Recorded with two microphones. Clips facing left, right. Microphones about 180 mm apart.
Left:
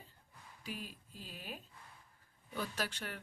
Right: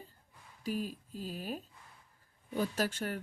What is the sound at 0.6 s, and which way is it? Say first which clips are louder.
Speech: right 10 dB; 40° right (ahead or behind).